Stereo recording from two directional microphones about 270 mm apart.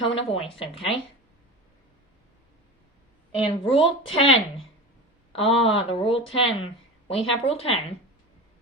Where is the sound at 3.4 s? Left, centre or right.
Centre.